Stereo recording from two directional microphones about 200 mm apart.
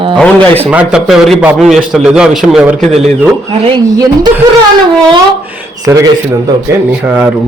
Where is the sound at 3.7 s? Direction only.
20° right (ahead or behind).